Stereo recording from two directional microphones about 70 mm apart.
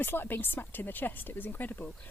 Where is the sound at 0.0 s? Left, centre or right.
Left.